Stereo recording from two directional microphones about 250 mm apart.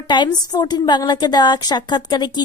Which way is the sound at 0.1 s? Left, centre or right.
Centre.